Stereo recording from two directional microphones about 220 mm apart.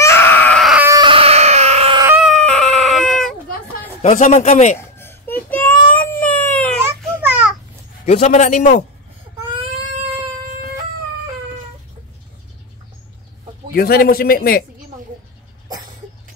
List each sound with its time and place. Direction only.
0.0 s baby cry: 10° left (ahead or behind)
0.8 s baby cry: 20° right (ahead or behind)
2.0 s a sound: 10° right (ahead or behind)
4.0 s a man's voice: 30° left (ahead or behind)
4.7 s a sound: 10° left (ahead or behind)
5.9 s baby cry: 5° left (ahead or behind)
7.2 s babbling: 5° right (ahead or behind)
8.0 s a man's voice: 30° left (ahead or behind)
9.6 s a sound: 25° right (ahead or behind)
13.7 s a man's voice: 45° left (ahead or behind)